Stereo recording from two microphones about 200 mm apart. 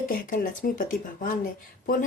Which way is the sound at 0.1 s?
45° left (ahead or behind).